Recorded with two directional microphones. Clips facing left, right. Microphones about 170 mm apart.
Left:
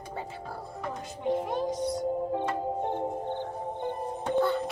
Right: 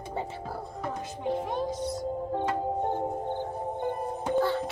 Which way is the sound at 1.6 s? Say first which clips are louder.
Left 2 dB; 10° left (ahead or behind).